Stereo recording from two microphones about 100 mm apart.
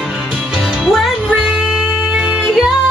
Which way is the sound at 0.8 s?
Centre (ahead or behind).